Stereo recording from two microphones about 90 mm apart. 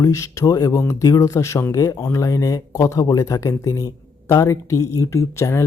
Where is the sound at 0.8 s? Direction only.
30° left (ahead or behind).